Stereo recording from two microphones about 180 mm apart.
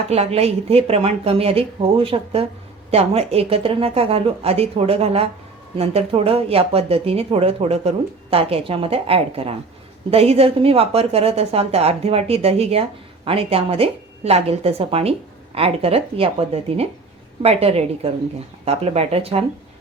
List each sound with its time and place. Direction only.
0.1 s speech: 35° right (ahead or behind)